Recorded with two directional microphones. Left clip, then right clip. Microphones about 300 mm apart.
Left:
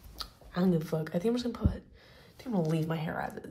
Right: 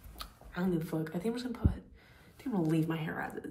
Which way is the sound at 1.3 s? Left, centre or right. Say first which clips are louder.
Left 4 dB; left.